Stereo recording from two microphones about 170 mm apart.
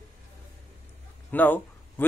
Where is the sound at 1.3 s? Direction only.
10° left (ahead or behind).